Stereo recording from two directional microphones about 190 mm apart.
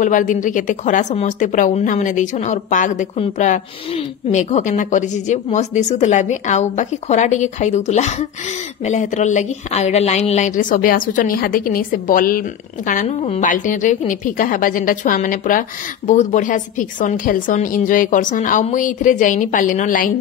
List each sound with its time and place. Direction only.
0.0 s a woman's voice: 40° left (ahead or behind)